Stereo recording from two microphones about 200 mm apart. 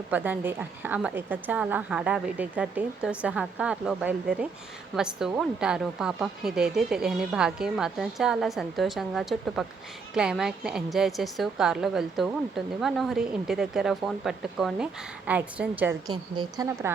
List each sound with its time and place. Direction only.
0.1 s a woman's voice: 10° right (ahead or behind)
16.0 s a woman's voice: 20° right (ahead or behind)